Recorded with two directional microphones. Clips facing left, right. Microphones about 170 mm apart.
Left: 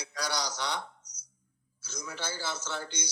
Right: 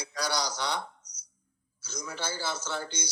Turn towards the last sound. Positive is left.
turn(degrees=-35)  # may be behind; listen again after turning